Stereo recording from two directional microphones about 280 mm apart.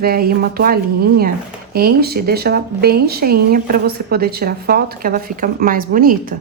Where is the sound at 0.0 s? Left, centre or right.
Right.